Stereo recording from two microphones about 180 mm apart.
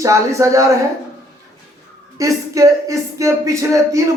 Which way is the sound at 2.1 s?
15° right (ahead or behind).